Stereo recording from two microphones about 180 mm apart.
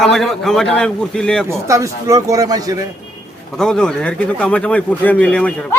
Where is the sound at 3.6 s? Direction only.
5° left (ahead or behind).